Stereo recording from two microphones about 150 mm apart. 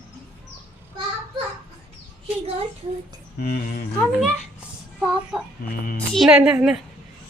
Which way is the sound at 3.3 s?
90° left.